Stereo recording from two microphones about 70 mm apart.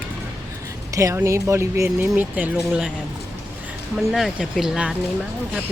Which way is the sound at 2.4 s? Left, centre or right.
Right.